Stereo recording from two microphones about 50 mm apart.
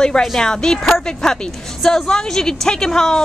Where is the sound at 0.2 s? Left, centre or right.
Centre.